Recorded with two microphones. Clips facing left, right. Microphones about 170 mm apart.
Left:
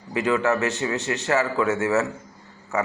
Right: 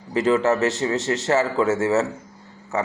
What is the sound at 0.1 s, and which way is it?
Speech, 30° right (ahead or behind).